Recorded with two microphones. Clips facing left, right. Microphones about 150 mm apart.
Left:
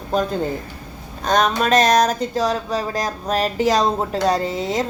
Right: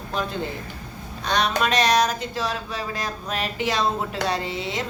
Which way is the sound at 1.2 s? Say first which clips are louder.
Left 5 dB; 45° left (ahead or behind).